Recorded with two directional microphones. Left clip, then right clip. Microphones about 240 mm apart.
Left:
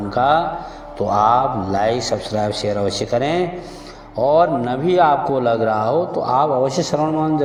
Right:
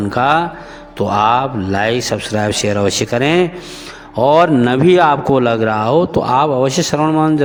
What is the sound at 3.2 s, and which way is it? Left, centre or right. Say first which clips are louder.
Speech: right 5 dB; right.